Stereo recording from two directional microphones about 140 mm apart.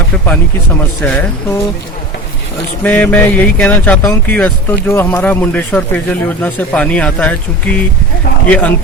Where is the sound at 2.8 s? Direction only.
10° left (ahead or behind).